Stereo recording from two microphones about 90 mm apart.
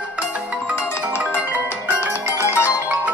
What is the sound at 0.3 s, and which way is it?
Marimba, 15° right (ahead or behind).